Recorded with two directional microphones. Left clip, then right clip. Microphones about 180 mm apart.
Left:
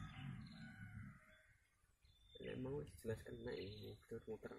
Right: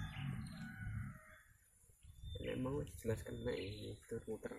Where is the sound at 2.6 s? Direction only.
30° left (ahead or behind).